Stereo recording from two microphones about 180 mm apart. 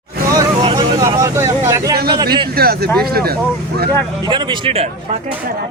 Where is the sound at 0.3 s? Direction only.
20° right (ahead or behind).